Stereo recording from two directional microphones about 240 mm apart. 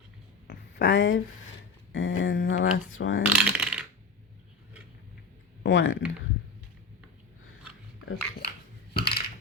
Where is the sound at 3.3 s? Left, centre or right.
Centre.